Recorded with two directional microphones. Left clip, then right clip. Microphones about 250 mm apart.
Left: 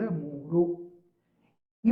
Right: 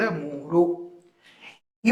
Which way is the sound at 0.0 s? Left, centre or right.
Centre.